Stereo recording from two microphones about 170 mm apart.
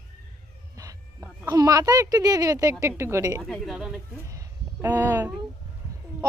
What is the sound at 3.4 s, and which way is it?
Speech, centre (ahead or behind).